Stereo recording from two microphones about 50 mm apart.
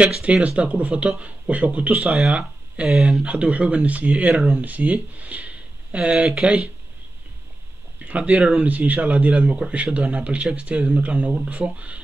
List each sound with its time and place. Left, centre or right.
0.2 s speech: right
2.0 s speech: centre
2.2 s speech: right
6.2 s speech: centre
8.1 s speech: right